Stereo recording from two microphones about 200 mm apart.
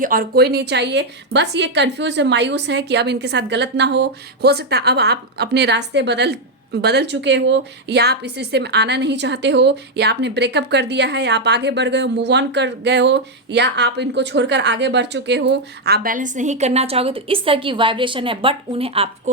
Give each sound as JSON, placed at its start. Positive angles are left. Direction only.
{"t": 0.0, "sound": "a woman's voice", "side_deg": -45}